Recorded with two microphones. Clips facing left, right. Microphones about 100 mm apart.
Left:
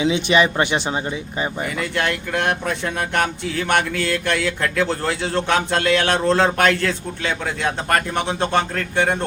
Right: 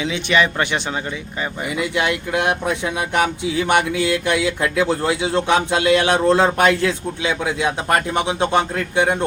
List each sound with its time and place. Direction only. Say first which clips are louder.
0.0 s speech: left 2 dB; 20° left (ahead or behind)
1.8 s speech: right 3 dB; 10° right (ahead or behind)